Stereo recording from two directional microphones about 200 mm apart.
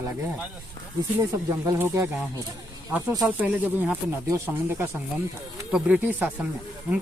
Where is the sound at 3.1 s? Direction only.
15° right (ahead or behind).